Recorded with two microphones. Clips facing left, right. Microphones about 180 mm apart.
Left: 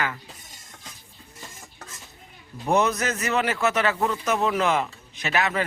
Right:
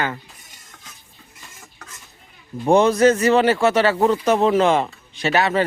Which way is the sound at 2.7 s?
30° right (ahead or behind).